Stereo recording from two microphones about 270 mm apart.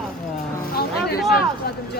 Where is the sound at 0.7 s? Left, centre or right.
Left.